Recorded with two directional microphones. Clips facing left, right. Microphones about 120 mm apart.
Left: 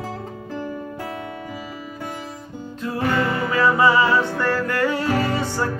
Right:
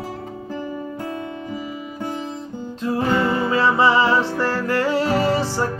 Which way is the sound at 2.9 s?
25° right (ahead or behind).